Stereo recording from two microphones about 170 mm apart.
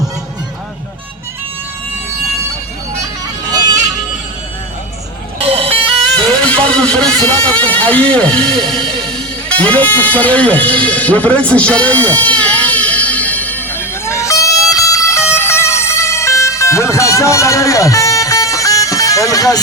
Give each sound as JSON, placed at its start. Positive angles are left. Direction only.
{"t": 3.4, "sound": "music", "side_deg": -25}
{"t": 5.5, "sound": "vehicle", "side_deg": -35}
{"t": 6.1, "sound": "speech", "side_deg": 5}
{"t": 9.0, "sound": "music", "side_deg": 5}
{"t": 14.7, "sound": "emergency vehicle", "side_deg": 20}